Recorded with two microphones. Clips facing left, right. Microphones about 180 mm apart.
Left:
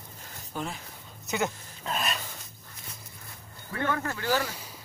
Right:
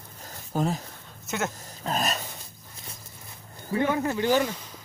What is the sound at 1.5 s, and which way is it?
Speech, 40° right (ahead or behind).